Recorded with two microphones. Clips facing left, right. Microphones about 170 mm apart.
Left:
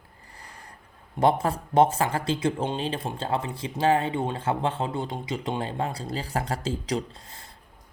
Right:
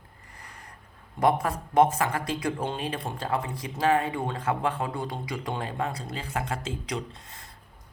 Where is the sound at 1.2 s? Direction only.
25° left (ahead or behind).